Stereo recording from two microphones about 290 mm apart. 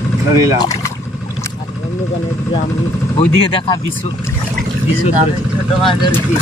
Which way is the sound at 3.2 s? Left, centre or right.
Centre.